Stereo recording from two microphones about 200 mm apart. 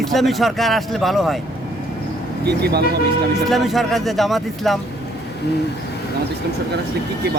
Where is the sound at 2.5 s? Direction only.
55° right (ahead or behind).